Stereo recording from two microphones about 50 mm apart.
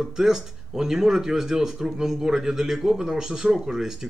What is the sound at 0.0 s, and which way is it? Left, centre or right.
Speech, centre.